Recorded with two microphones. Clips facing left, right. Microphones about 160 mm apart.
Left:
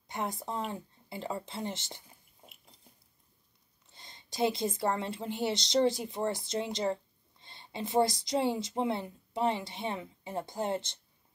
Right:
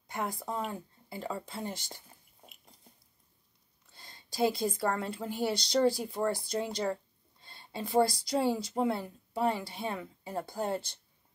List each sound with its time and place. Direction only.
0.1 s a woman's voice: 25° left (ahead or behind)
3.9 s a woman's voice: 20° left (ahead or behind)